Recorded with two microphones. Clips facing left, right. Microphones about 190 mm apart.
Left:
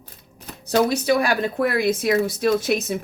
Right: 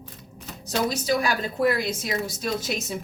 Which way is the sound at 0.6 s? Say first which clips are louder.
Left 6 dB; 60° left (ahead or behind).